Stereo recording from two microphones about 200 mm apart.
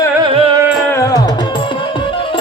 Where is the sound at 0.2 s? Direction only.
25° right (ahead or behind).